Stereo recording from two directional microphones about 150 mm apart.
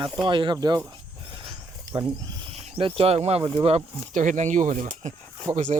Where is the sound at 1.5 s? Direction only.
25° right (ahead or behind).